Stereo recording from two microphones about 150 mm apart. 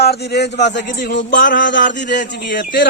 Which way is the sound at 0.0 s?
90° left.